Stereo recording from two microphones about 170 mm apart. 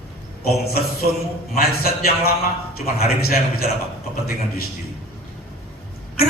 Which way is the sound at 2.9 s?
65° left (ahead or behind).